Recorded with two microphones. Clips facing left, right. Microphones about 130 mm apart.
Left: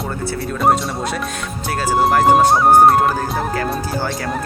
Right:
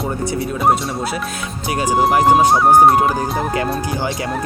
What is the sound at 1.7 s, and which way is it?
Speech, 15° right (ahead or behind).